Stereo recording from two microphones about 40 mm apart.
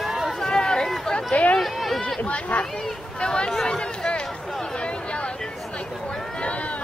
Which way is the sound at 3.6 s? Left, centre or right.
Left.